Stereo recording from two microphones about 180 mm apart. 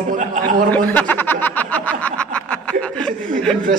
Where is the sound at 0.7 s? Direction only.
10° left (ahead or behind).